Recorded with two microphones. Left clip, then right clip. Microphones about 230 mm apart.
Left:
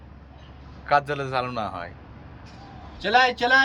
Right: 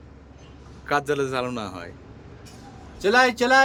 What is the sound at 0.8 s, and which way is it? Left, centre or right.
Speech, centre.